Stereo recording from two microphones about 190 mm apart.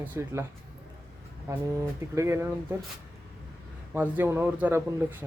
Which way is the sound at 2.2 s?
15° right (ahead or behind).